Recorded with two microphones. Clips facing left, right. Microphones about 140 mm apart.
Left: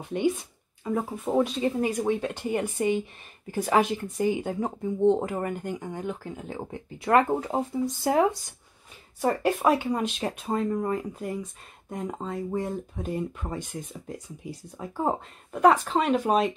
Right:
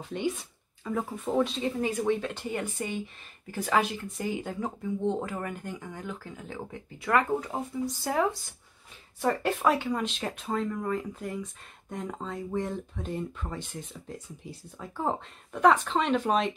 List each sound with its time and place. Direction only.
0.0 s speech: 15° left (ahead or behind)
9.4 s speech: 15° left (ahead or behind)
11.0 s speech: 15° left (ahead or behind)